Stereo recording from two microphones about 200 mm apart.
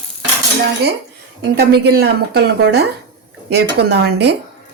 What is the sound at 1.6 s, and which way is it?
A woman's voice, 55° right (ahead or behind).